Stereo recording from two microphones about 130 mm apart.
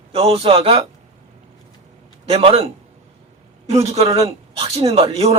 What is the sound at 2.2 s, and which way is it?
Speech, 50° right (ahead or behind).